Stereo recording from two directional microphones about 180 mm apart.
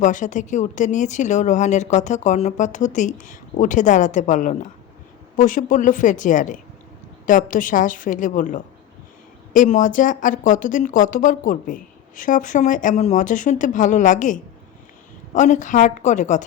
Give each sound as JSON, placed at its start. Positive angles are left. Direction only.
{"t": 0.0, "sound": "speech", "side_deg": 45}